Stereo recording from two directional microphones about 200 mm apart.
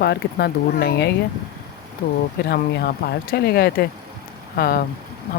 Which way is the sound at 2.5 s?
50° left (ahead or behind).